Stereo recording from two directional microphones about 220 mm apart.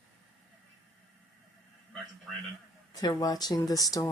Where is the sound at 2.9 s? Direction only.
15° left (ahead or behind).